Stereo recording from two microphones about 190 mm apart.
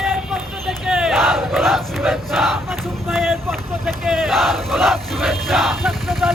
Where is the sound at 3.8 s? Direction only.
Centre (ahead or behind).